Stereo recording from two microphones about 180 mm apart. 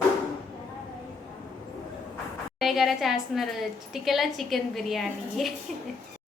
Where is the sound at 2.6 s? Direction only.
Centre (ahead or behind).